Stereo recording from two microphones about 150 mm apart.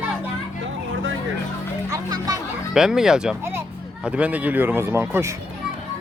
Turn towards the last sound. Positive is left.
turn(degrees=-15)  # may be behind; listen again after turning